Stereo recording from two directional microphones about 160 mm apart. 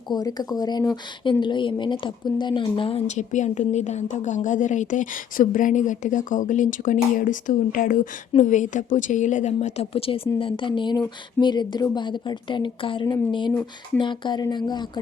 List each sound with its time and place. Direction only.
0.1 s speech: 25° left (ahead or behind)
3.2 s a woman's voice: 50° left (ahead or behind); by 13.1 s 30° left (ahead or behind)
13.5 s speech: 10° left (ahead or behind)
14.0 s speech: 30° left (ahead or behind)